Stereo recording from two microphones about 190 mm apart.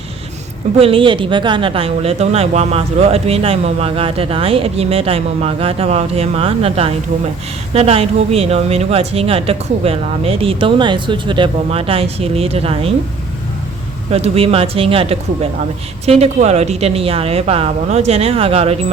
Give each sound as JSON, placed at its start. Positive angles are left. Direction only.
{"t": 0.8, "sound": "speech", "side_deg": -30}
{"t": 14.1, "sound": "speech", "side_deg": -30}